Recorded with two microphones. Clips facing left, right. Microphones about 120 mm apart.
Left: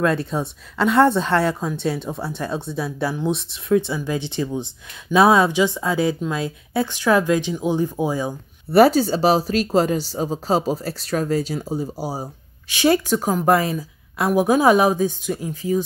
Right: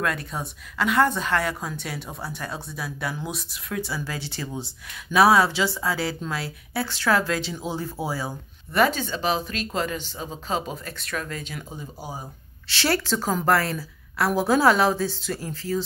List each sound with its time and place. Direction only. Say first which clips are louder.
0.0 s speech: left 7 dB; 25° left (ahead or behind)
8.7 s speech: left 8 dB; 35° left (ahead or behind)
12.6 s a woman's voice: left 7 dB; 15° left (ahead or behind)